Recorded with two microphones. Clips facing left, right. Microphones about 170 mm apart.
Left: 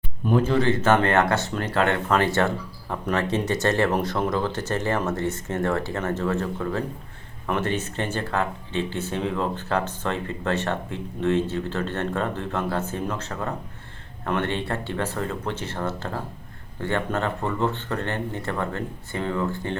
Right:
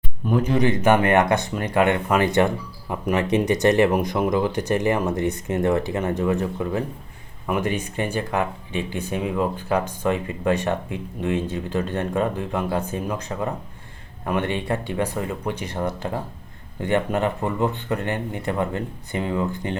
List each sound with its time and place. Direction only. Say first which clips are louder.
0.4 s speech: right 5 dB; 15° right (ahead or behind)